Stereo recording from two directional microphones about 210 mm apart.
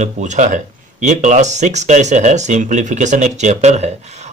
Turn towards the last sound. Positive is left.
turn(degrees=-30)  # may be behind; listen again after turning